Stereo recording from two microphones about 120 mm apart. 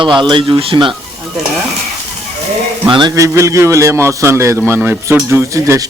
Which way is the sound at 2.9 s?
40° right (ahead or behind).